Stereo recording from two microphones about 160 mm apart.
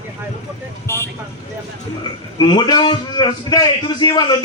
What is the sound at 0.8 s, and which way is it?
Speech, 15° left (ahead or behind).